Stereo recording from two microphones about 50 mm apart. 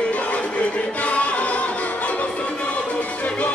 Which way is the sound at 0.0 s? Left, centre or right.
Left.